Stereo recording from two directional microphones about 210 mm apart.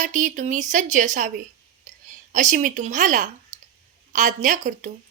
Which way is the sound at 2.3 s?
35° right (ahead or behind).